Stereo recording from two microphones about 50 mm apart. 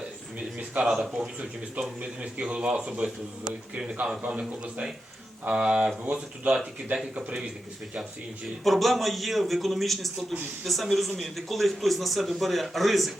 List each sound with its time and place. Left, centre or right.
0.8 s speech: centre
2.0 s a man's voice: right
4.2 s a man's voice: right
8.6 s a man's voice: centre